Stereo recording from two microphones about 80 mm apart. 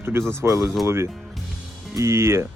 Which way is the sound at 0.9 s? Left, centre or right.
Right.